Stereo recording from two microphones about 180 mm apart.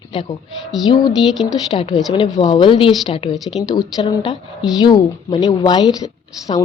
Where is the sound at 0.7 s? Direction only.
Centre (ahead or behind).